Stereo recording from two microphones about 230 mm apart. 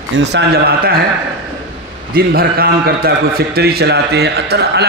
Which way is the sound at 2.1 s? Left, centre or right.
Right.